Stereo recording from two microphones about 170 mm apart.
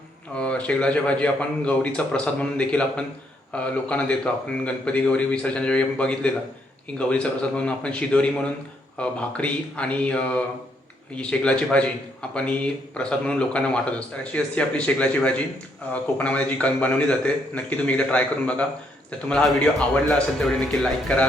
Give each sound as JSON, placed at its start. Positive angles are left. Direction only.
{"t": 0.3, "sound": "a man's voice", "side_deg": 5}